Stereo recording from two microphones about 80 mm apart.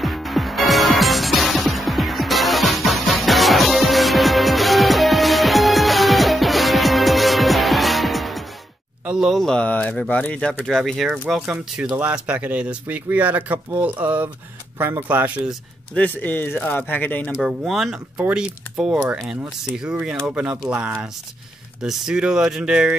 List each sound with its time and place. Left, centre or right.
0.0 s music: centre
9.0 s speech: centre
9.4 s speech: centre
10.6 s speech: centre
11.8 s speech: centre
14.8 s speech: right
15.0 s speech: centre
15.9 s speech: left
17.4 s speech: centre